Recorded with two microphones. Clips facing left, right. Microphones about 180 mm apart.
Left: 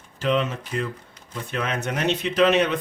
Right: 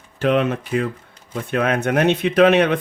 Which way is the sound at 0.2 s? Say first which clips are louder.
Right 5 dB; 60° right (ahead or behind).